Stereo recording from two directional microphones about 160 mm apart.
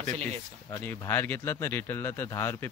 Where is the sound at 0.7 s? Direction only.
15° left (ahead or behind).